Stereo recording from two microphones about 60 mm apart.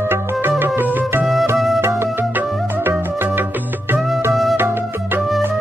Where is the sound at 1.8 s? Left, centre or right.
Right.